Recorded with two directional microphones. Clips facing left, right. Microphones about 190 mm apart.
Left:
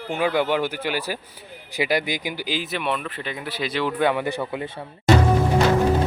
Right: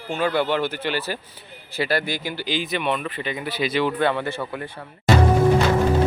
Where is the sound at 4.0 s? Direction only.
10° left (ahead or behind).